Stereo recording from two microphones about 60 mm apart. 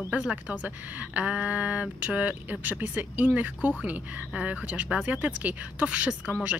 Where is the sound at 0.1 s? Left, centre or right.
Centre.